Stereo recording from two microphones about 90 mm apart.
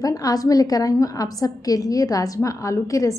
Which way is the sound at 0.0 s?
45° left (ahead or behind).